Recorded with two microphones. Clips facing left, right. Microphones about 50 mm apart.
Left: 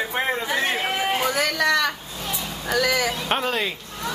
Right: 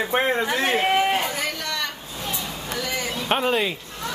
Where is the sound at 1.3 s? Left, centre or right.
Left.